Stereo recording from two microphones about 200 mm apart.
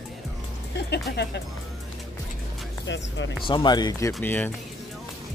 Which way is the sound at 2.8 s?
65° left (ahead or behind).